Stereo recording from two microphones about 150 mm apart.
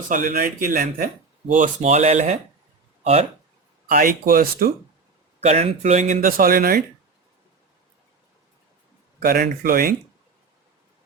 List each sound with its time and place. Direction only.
0.1 s speech: 60° right (ahead or behind); by 3.2 s 45° right (ahead or behind)
3.8 s speech: 75° right (ahead or behind)
5.4 s speech: 50° right (ahead or behind); by 6.8 s 75° right (ahead or behind)
9.2 s speech: 80° right